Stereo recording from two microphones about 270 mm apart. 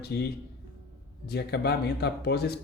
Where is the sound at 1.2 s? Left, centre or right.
Left.